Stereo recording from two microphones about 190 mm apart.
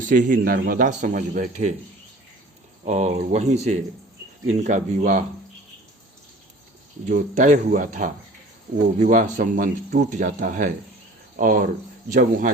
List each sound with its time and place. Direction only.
0.0 s speech: 45° right (ahead or behind)
2.8 s speech: 35° right (ahead or behind)
7.0 s speech: 40° right (ahead or behind)